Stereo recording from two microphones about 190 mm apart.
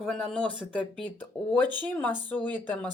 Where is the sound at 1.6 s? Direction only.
25° right (ahead or behind).